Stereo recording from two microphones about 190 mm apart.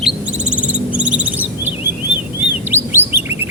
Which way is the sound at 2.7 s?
10° right (ahead or behind).